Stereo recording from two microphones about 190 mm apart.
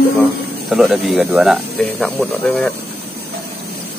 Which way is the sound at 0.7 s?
Centre (ahead or behind).